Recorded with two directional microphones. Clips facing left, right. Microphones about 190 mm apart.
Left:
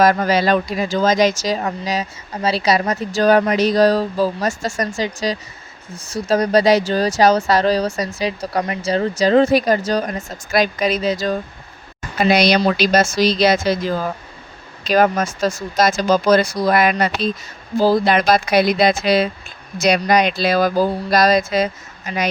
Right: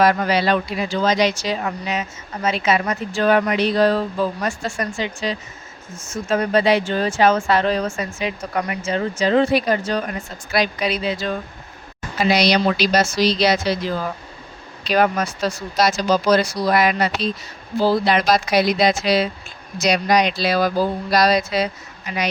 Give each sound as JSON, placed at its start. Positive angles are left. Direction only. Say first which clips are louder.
{"t": 0.0, "sound": "speech", "louder": "left 2 dB", "side_deg": 45}
{"t": 12.1, "sound": "speech", "louder": "left 3 dB", "side_deg": 50}